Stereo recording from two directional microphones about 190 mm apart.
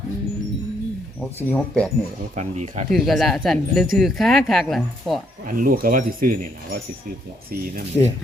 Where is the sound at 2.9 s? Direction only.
Centre (ahead or behind).